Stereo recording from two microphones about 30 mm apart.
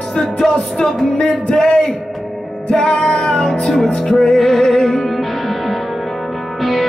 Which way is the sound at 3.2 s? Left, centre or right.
Left.